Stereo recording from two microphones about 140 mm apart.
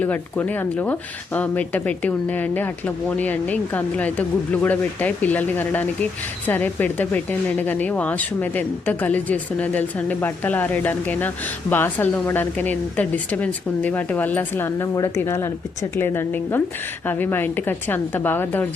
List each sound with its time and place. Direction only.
0.0 s speech: 10° left (ahead or behind)